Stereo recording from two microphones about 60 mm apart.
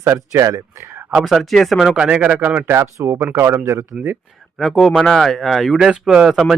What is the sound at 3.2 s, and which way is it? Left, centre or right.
Speech, right.